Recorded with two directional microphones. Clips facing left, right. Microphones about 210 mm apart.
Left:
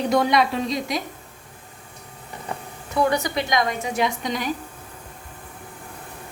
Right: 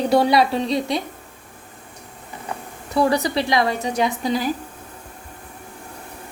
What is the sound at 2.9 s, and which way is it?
Speech, 35° right (ahead or behind).